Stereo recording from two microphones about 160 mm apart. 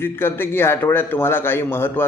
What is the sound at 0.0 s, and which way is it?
Speech, 15° left (ahead or behind).